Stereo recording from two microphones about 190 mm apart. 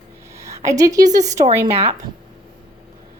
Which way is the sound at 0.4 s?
15° right (ahead or behind).